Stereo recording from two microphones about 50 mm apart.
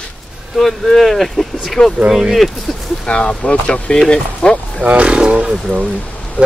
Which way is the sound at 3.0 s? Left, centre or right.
Left.